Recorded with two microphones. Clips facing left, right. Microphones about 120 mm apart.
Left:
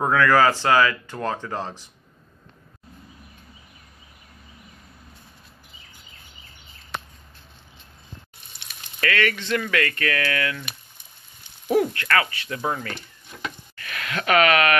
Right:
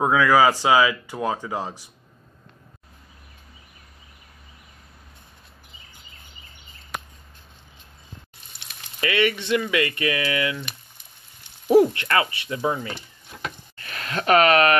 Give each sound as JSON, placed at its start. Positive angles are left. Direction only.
{"t": 0.0, "sound": "speech", "side_deg": -10}
{"t": 9.0, "sound": "speech", "side_deg": -15}
{"t": 11.6, "sound": "speech", "side_deg": -25}
{"t": 13.7, "sound": "speech", "side_deg": -30}